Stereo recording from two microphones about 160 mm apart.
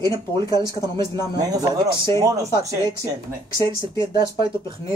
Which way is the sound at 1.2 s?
25° right (ahead or behind).